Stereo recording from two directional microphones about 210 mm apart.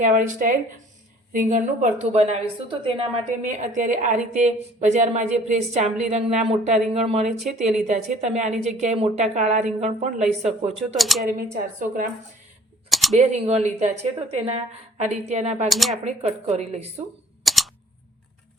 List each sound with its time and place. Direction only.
0.0 s a woman's voice: 40° right (ahead or behind)
10.8 s speech: centre (ahead or behind)
11.3 s a woman's voice: 40° right (ahead or behind)
12.9 s typing: centre (ahead or behind)
13.1 s a woman's voice: 30° right (ahead or behind)
15.7 s speech: centre (ahead or behind)
16.0 s a woman's voice: 30° right (ahead or behind)
17.4 s camera: centre (ahead or behind)